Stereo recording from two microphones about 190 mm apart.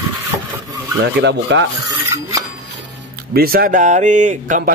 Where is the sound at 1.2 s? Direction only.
75° right (ahead or behind).